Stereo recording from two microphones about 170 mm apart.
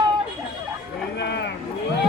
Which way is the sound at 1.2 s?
90° left.